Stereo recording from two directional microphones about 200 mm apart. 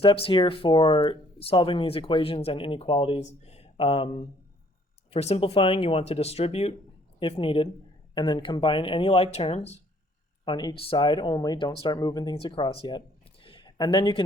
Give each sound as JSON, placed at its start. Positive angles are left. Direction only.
{"t": 0.0, "sound": "speech", "side_deg": 25}
{"t": 10.4, "sound": "speech", "side_deg": 20}
{"t": 13.4, "sound": "a sound", "side_deg": 25}